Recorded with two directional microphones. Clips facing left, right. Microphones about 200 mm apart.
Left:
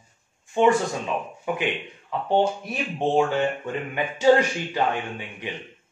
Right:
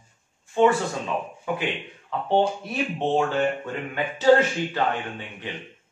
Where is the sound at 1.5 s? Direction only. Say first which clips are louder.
Left 1 dB; 15° left (ahead or behind).